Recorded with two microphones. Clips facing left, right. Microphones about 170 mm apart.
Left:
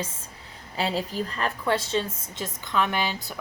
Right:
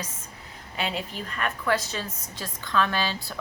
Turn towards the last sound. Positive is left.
turn(degrees=20)  # may be behind; listen again after turning